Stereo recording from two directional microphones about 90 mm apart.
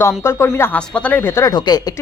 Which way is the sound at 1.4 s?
50° left (ahead or behind).